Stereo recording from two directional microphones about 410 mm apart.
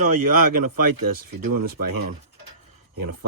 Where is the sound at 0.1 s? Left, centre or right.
Right.